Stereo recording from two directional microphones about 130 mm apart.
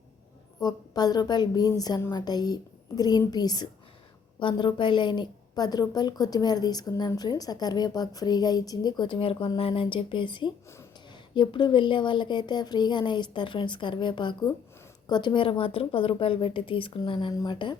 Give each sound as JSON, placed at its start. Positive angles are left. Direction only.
{"t": 0.6, "sound": "a woman's voice", "side_deg": 30}